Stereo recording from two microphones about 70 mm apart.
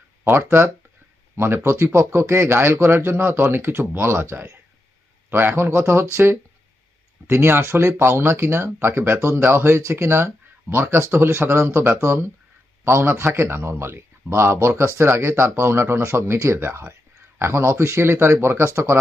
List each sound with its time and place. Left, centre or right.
0.3 s speech: right